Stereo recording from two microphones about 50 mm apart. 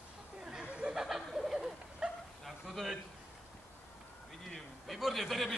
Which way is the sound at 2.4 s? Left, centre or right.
Centre.